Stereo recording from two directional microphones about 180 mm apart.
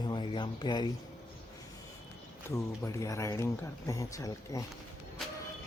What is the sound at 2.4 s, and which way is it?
Speech, 15° left (ahead or behind).